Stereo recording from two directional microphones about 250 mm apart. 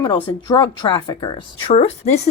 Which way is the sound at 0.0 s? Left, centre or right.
Centre.